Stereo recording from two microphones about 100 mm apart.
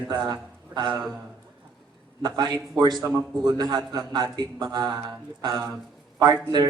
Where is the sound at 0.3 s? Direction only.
45° right (ahead or behind).